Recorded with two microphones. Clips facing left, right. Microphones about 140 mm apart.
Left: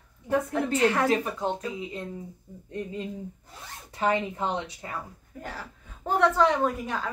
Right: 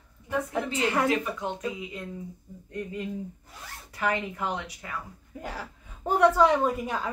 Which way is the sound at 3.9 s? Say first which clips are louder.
Left 3 dB; 25° left (ahead or behind).